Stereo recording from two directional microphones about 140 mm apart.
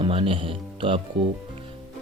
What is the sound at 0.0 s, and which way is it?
Speech, 40° right (ahead or behind).